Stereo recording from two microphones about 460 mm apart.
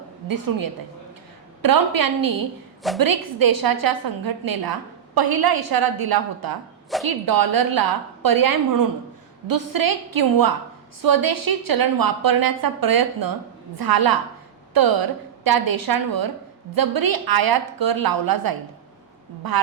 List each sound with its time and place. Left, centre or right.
0.3 s a woman's voice: right